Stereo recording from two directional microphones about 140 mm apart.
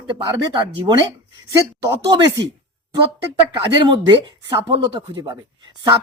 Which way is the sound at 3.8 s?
30° right (ahead or behind).